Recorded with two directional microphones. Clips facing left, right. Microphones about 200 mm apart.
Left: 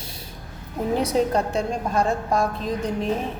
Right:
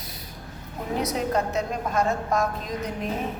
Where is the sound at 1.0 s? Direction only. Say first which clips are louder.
Left 2 dB; 30° left (ahead or behind).